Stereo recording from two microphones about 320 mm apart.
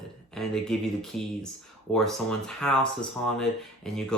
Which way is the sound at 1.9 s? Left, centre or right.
Centre.